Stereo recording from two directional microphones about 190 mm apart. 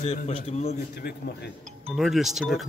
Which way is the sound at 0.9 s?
55° left (ahead or behind).